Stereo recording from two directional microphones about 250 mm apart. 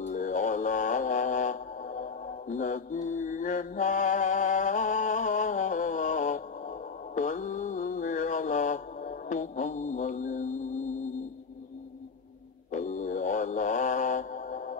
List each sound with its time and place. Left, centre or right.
0.0 s mantra: left
12.7 s mantra: left